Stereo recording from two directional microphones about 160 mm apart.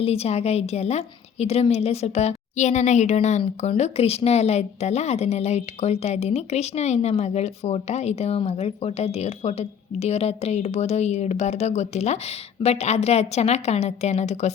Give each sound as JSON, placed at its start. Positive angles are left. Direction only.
{"t": 0.0, "sound": "a woman's voice", "side_deg": 40}